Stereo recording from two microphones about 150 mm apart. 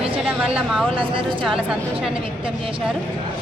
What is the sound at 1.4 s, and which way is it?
Speech, 5° right (ahead or behind).